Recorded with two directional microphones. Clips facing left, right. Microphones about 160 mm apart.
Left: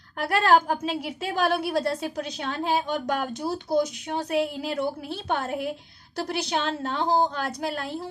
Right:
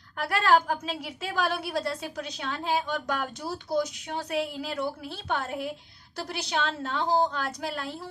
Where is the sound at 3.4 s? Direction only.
25° left (ahead or behind).